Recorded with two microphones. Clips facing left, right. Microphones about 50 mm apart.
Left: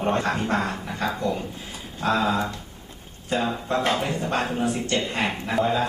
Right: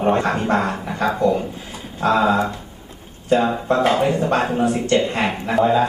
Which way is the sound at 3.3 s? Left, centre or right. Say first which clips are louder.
Right 7 dB; centre.